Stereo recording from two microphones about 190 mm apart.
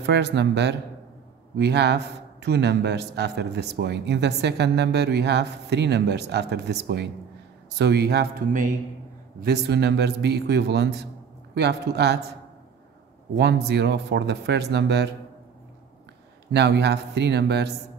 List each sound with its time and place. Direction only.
0.0 s speech: 60° right (ahead or behind)
9.4 s speech: 60° right (ahead or behind)
13.4 s speech: 60° right (ahead or behind)
16.5 s speech: 60° right (ahead or behind)